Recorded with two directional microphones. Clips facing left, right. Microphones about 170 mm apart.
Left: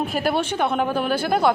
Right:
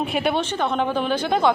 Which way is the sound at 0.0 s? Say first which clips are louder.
Even; centre (ahead or behind).